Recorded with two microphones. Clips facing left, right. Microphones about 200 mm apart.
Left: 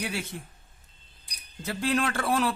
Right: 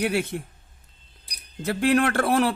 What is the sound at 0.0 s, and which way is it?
Speech, 60° right (ahead or behind).